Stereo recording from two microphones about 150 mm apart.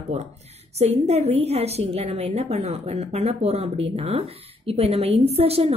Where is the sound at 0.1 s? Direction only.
45° right (ahead or behind).